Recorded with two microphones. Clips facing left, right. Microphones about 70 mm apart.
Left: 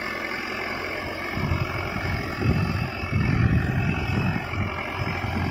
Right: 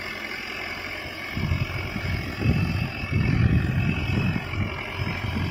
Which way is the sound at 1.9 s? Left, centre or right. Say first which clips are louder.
Left 3 dB; left.